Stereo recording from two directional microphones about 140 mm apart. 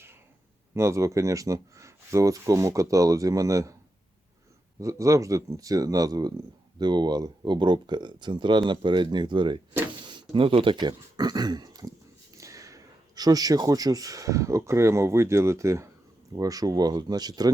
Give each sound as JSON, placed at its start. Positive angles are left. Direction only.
{"t": 0.7, "sound": "speech", "side_deg": -20}
{"t": 4.8, "sound": "speech", "side_deg": -20}